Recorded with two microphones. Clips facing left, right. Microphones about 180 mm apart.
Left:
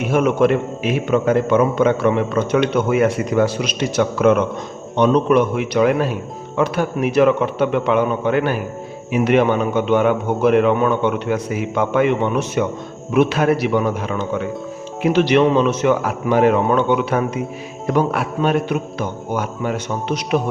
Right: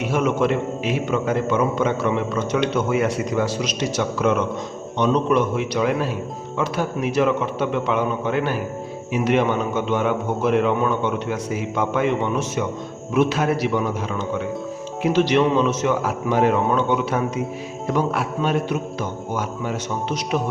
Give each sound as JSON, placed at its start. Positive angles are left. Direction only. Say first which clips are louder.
{"t": 0.1, "sound": "a man's voice", "louder": "left 5 dB", "side_deg": 55}